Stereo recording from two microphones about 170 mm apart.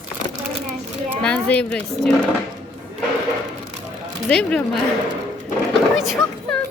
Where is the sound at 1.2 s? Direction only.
10° left (ahead or behind).